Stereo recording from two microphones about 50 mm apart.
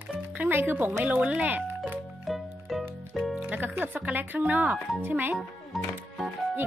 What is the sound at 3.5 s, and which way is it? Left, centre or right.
Speech, right.